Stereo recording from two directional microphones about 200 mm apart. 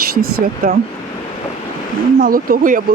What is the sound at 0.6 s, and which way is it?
Speech, 45° right (ahead or behind).